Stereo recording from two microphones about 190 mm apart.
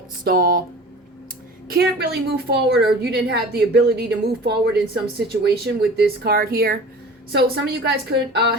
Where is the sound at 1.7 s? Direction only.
55° right (ahead or behind).